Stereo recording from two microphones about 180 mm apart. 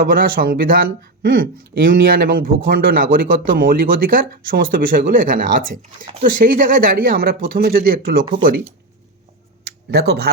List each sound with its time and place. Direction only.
0.0 s speech: 50° right (ahead or behind)
9.6 s speech: 65° right (ahead or behind)